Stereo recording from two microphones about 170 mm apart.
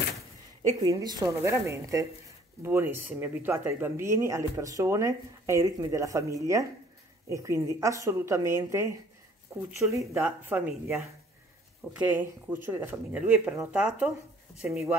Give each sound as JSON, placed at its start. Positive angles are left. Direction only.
{"t": 0.7, "sound": "a woman's voice", "side_deg": -20}